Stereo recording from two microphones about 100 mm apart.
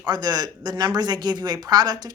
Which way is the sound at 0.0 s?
45° right (ahead or behind).